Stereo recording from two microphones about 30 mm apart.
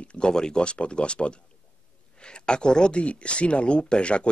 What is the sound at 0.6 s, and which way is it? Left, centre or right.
Speech, left.